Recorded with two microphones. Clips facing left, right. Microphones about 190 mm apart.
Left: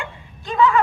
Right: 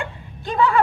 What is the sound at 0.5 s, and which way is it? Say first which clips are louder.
Speech: left 2 dB; 35° right (ahead or behind).